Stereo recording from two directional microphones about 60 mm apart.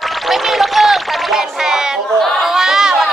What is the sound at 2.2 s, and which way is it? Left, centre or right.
Chatter, centre.